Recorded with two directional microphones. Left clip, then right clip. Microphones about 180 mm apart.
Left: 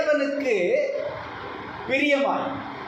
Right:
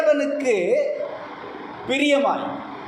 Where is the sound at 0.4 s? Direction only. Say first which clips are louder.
Right 4 dB; 45° right (ahead or behind).